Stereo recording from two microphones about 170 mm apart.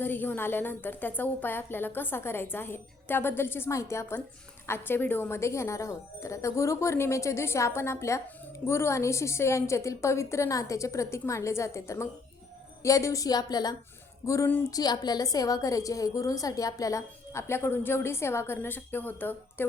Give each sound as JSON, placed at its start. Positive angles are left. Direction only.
{"t": 0.0, "sound": "a woman's voice", "side_deg": 10}